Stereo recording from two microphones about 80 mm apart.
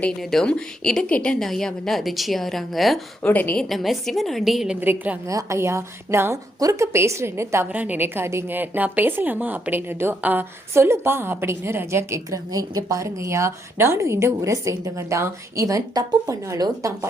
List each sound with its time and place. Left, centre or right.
0.2 s a woman's voice: centre
3.2 s a woman's voice: left
3.6 s a woman's voice: centre
4.8 s a woman's voice: right
5.3 s a woman's voice: right
7.7 s a woman's voice: right
12.5 s a woman's voice: right